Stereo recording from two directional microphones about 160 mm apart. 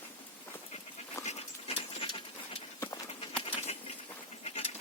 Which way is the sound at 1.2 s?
35° left (ahead or behind).